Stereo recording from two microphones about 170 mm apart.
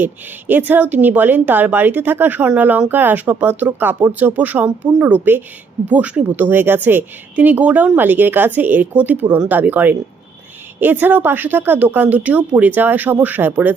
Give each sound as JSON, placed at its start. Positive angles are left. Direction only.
{"t": 0.0, "sound": "speech", "side_deg": -10}